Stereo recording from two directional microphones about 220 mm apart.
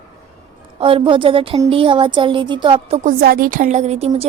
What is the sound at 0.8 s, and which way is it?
A woman's voice, 25° right (ahead or behind).